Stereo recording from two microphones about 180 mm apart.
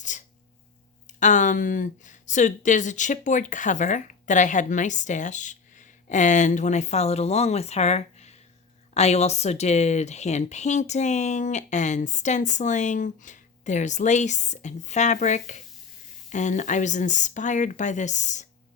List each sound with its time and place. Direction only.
1.2 s speech: 45° left (ahead or behind)